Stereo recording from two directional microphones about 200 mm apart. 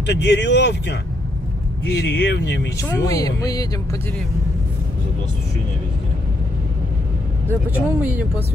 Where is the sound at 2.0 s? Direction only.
55° left (ahead or behind).